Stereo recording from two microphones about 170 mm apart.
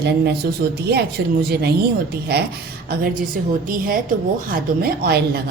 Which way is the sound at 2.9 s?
55° right (ahead or behind).